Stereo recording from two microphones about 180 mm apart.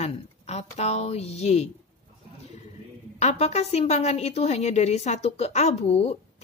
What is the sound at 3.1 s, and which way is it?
Speech, 40° left (ahead or behind).